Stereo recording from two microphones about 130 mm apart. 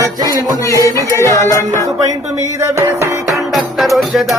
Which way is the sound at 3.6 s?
Centre (ahead or behind).